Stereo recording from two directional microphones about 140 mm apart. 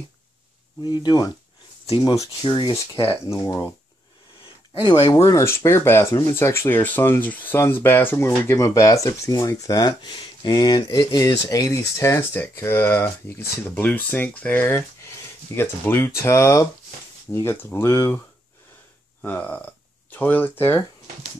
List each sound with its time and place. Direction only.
0.8 s speech: 30° left (ahead or behind)
2.4 s speech: 35° left (ahead or behind)
3.3 s speech: 25° left (ahead or behind)
5.1 s speech: 20° left (ahead or behind)
19.2 s speech: 10° left (ahead or behind)